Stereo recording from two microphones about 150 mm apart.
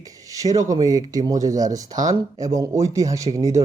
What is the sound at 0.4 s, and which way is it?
A man's voice, 20° right (ahead or behind).